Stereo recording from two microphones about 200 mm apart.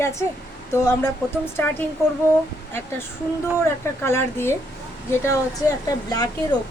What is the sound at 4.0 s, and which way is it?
Speech, 10° left (ahead or behind).